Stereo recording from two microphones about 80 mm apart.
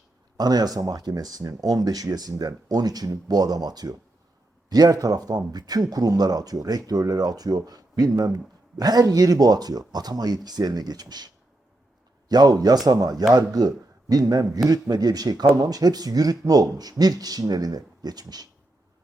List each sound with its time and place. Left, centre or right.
0.3 s speech: right
12.3 s speech: right